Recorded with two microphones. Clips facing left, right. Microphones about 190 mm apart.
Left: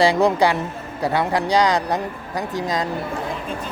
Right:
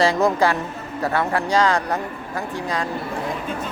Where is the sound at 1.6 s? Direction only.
15° left (ahead or behind).